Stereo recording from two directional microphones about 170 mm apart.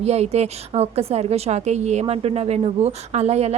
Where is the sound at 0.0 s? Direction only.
40° right (ahead or behind).